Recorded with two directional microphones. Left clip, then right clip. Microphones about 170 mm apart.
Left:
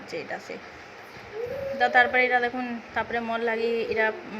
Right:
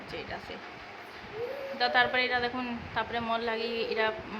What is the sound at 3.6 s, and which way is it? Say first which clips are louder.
Speech: left 6 dB; 45° left (ahead or behind).